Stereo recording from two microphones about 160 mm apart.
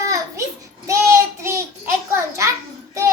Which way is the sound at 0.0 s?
20° right (ahead or behind).